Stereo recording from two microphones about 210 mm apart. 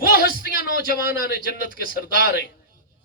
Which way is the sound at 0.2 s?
45° left (ahead or behind).